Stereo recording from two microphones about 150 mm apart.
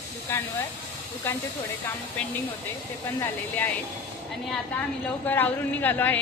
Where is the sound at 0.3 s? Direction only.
15° left (ahead or behind).